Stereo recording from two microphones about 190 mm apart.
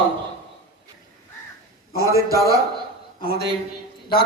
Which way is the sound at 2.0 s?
15° right (ahead or behind).